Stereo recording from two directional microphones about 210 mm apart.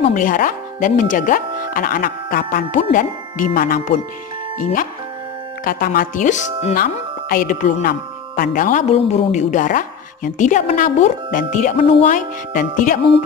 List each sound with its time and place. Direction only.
0.1 s speech: 40° left (ahead or behind)